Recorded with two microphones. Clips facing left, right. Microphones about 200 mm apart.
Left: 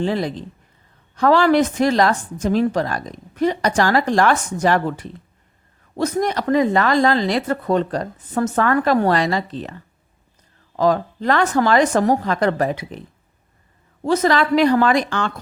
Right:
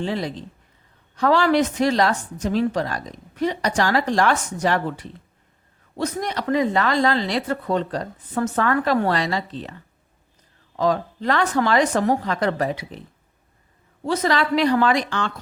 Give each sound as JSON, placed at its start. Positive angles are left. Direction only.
{"t": 0.0, "sound": "a woman's voice", "side_deg": 50}
{"t": 10.8, "sound": "a woman's voice", "side_deg": 50}
{"t": 14.0, "sound": "a woman's voice", "side_deg": 45}